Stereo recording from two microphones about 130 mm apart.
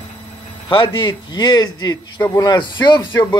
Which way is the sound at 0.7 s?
40° left (ahead or behind).